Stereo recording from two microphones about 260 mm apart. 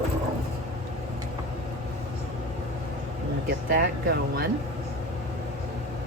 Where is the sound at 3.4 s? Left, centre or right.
Right.